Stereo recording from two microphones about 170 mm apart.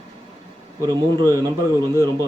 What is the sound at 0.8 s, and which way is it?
Speech, 20° right (ahead or behind).